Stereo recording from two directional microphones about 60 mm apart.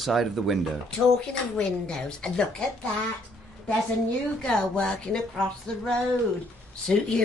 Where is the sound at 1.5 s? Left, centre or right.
Centre.